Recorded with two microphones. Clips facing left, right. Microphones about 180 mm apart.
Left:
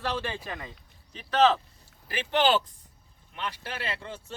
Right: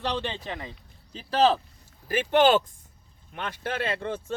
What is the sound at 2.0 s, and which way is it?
Speech, 45° right (ahead or behind).